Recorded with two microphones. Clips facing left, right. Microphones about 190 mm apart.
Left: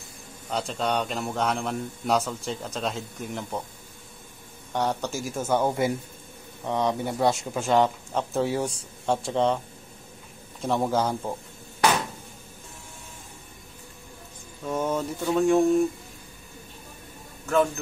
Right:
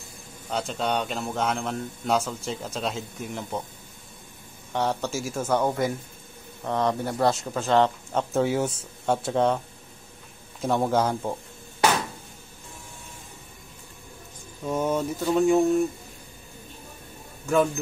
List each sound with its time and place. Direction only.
0.5 s speech: centre (ahead or behind)
4.7 s speech: centre (ahead or behind)
7.2 s a man's voice: 20° left (ahead or behind)
8.1 s speech: centre (ahead or behind)
10.6 s speech: centre (ahead or behind)
14.7 s speech: 10° right (ahead or behind)